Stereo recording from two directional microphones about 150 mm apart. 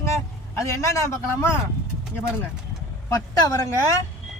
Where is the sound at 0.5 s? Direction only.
20° left (ahead or behind).